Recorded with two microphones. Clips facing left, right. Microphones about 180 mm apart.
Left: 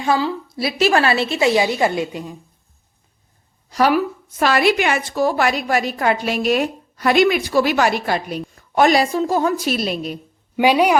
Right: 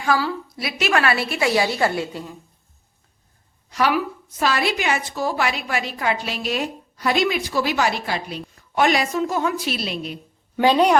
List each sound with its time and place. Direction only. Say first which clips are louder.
0.0 s a woman's voice: left 3 dB; 20° left (ahead or behind)
3.7 s a woman's voice: left 4 dB; 40° left (ahead or behind)
4.4 s a woman's voice: left 6 dB; 60° left (ahead or behind); by 10.2 s 45° left (ahead or behind)
10.6 s a woman's voice: left 1 dB; 10° left (ahead or behind)